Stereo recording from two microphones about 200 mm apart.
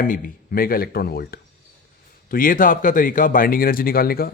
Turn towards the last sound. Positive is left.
turn(degrees=50)  # may be behind; listen again after turning